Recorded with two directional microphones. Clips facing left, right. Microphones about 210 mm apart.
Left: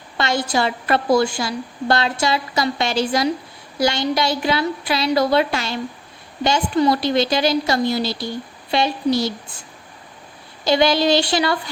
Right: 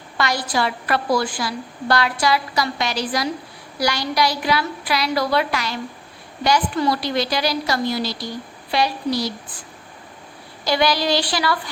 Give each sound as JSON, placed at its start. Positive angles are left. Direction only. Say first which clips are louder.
{"t": 0.2, "sound": "a woman's voice", "louder": "left 2 dB", "side_deg": 25}